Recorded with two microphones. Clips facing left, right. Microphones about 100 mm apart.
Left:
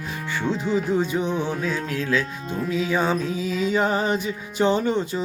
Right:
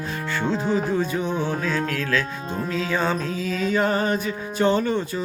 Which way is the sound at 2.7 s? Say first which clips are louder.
Left 2 dB; 15° left (ahead or behind).